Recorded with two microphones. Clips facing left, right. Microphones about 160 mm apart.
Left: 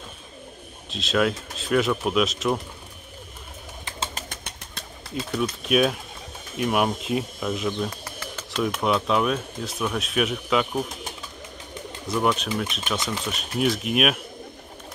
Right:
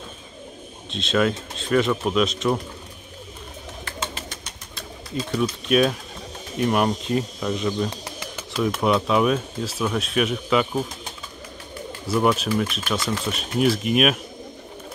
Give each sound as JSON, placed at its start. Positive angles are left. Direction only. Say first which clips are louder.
{"t": 0.8, "sound": "speech", "louder": "right 2 dB", "side_deg": 0}
{"t": 4.1, "sound": "bird", "louder": "right 1 dB", "side_deg": 55}
{"t": 5.3, "sound": "speech", "louder": "right 2 dB", "side_deg": 0}
{"t": 8.0, "sound": "bird", "louder": "right 2 dB", "side_deg": -15}
{"t": 8.5, "sound": "speech", "louder": "right 3 dB", "side_deg": 0}